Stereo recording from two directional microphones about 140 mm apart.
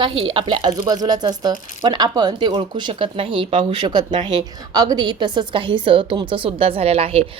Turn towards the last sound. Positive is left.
turn(degrees=-45)  # may be behind; listen again after turning